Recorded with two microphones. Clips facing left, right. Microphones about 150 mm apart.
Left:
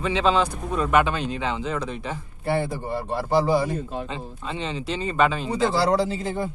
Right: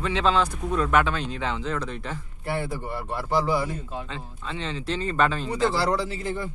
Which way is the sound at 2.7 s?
30° left (ahead or behind).